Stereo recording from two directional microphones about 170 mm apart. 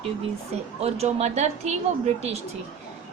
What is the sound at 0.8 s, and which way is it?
A woman's voice, 35° right (ahead or behind).